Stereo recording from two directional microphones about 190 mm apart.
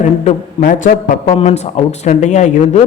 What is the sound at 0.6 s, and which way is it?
Speech, 50° left (ahead or behind).